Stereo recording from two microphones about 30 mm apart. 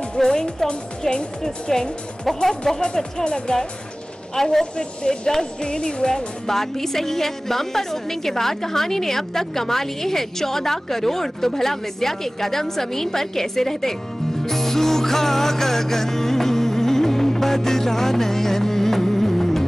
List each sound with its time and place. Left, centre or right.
0.2 s speech: left
2.8 s speech: left
4.4 s speech: centre
4.7 s speech: left
14.4 s music: centre